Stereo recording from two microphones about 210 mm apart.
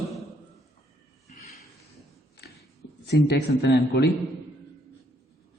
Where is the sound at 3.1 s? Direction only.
50° left (ahead or behind).